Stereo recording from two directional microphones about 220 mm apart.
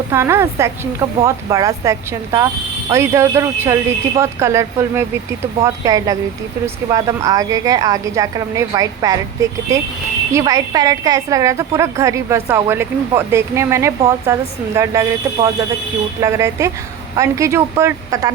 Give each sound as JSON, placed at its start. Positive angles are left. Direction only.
{"t": 0.1, "sound": "a woman's voice", "side_deg": -10}